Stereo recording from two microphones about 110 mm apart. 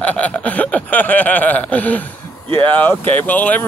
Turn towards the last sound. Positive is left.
turn(degrees=15)  # may be behind; listen again after turning